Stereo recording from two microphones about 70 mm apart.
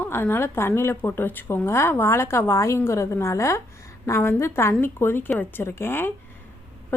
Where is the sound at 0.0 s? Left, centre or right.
Left.